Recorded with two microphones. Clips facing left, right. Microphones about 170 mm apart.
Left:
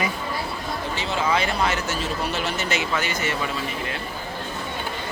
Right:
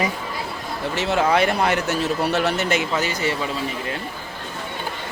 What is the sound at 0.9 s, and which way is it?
Speech, 65° right (ahead or behind).